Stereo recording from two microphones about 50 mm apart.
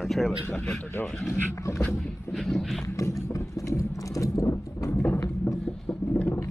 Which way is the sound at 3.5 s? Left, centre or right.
Left.